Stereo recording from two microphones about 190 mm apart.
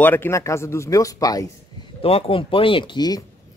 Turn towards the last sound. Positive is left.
turn(degrees=20)  # may be behind; listen again after turning